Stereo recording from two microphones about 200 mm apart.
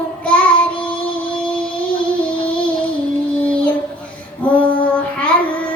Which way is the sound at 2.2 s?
5° left (ahead or behind).